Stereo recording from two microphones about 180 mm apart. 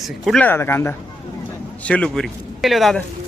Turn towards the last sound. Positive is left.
turn(degrees=0)  # may be behind; listen again after turning